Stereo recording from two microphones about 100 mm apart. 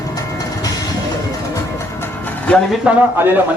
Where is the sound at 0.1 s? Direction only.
40° left (ahead or behind).